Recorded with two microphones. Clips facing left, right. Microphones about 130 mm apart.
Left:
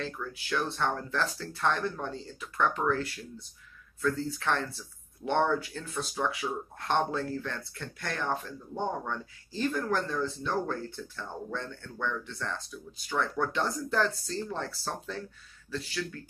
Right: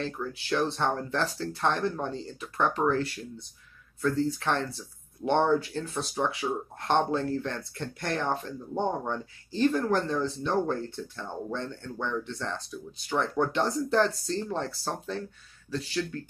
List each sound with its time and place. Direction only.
0.0 s speech: 25° right (ahead or behind)
4.0 s speech: 20° right (ahead or behind)